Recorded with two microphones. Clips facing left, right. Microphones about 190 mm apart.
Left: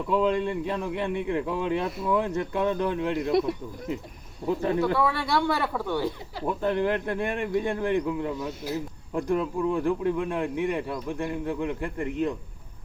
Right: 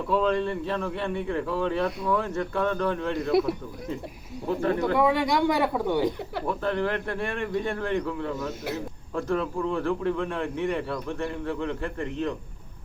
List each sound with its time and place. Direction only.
0.1 s speech: 15° left (ahead or behind)
4.4 s speech: 15° left (ahead or behind)
4.9 s speech: 15° right (ahead or behind)
6.5 s speech: 15° left (ahead or behind)